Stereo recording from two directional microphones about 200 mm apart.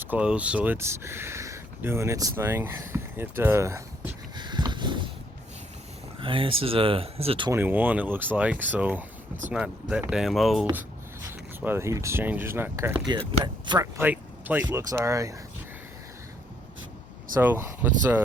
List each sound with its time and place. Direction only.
0.0 s speech: 5° right (ahead or behind); by 5.1 s 25° right (ahead or behind)
6.1 s speech: 25° right (ahead or behind)
7.5 s speech: 10° right (ahead or behind)